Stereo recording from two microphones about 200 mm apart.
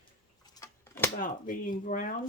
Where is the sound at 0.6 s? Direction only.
10° left (ahead or behind).